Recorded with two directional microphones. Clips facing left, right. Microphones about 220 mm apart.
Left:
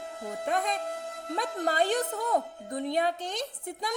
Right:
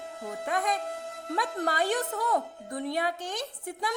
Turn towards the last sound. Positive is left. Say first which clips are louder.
# even
turn(degrees=20)  # may be behind; listen again after turning